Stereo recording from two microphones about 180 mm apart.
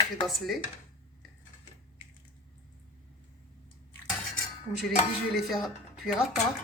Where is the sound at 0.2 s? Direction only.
Centre (ahead or behind).